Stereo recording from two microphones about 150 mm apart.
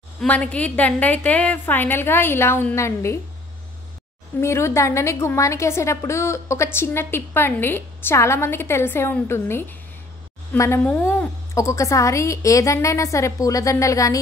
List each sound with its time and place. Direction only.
0.2 s a woman's voice: 10° left (ahead or behind)
4.4 s a woman's voice: 15° left (ahead or behind)